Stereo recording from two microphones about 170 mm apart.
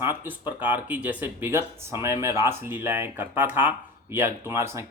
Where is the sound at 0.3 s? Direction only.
10° right (ahead or behind).